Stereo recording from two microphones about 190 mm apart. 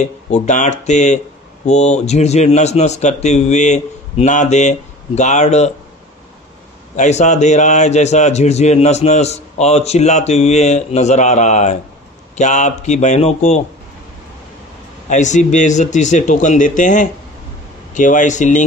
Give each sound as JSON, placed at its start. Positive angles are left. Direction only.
{"t": 0.0, "sound": "a man's voice", "side_deg": 40}
{"t": 7.0, "sound": "a man's voice", "side_deg": 35}
{"t": 15.0, "sound": "a man's voice", "side_deg": 40}